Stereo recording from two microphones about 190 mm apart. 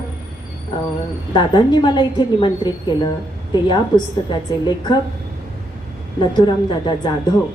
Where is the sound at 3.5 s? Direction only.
25° left (ahead or behind).